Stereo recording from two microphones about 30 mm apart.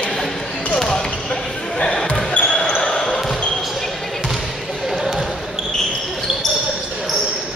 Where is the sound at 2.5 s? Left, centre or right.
Left.